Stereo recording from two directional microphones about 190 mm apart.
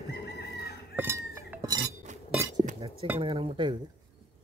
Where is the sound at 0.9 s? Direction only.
15° right (ahead or behind).